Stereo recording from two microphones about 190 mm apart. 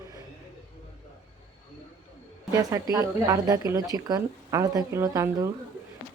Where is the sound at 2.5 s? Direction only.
20° right (ahead or behind).